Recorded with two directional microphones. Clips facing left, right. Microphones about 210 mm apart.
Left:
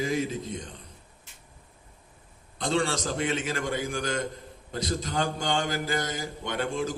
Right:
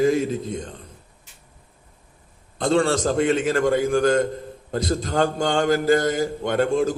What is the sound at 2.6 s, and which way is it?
A man's voice, 50° right (ahead or behind).